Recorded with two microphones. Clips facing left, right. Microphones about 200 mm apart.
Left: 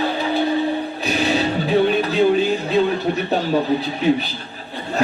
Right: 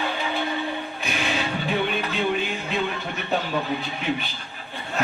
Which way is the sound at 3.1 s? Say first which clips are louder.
Left 7 dB; 35° left (ahead or behind).